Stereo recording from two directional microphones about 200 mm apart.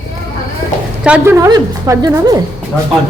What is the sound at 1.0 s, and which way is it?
A woman's voice, 10° right (ahead or behind).